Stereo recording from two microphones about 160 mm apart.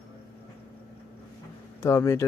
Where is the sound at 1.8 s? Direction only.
20° left (ahead or behind).